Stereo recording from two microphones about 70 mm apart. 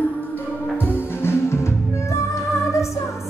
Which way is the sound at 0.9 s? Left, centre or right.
Left.